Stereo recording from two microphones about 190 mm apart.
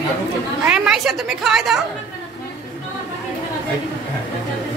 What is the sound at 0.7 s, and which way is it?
A woman's voice, 5° right (ahead or behind).